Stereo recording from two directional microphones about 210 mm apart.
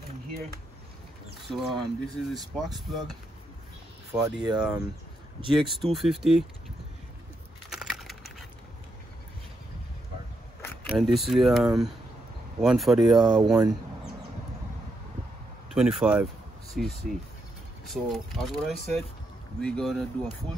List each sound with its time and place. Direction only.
1.5 s speech: centre (ahead or behind)
4.2 s speech: 20° right (ahead or behind)
4.6 s speech: 5° right (ahead or behind)
7.7 s computer keyboard: centre (ahead or behind)
10.6 s a sound: 10° left (ahead or behind)
11.0 s speech: centre (ahead or behind)
15.7 s speech: 5° right (ahead or behind)